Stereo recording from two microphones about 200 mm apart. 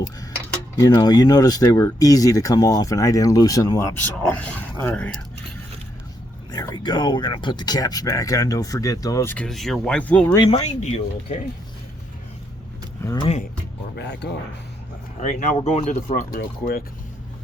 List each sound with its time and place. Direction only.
0.8 s speech: 20° left (ahead or behind)
6.5 s speech: 20° left (ahead or behind)
10.3 s speech: 20° left (ahead or behind)
10.8 s speech: 35° left (ahead or behind)
13.0 s speech: 15° left (ahead or behind)
13.2 s speech: 35° left (ahead or behind)
13.9 s speech: 60° left (ahead or behind)
15.2 s speech: 40° left (ahead or behind)